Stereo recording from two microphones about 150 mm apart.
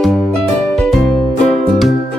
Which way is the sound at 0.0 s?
Centre (ahead or behind).